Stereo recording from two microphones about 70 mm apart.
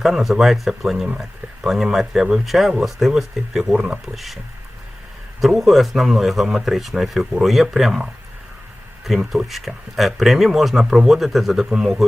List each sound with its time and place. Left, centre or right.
0.0 s speech: centre
4.0 s speech: centre
5.4 s speech: centre